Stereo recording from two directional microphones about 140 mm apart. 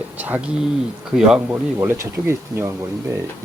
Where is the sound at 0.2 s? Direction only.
10° right (ahead or behind).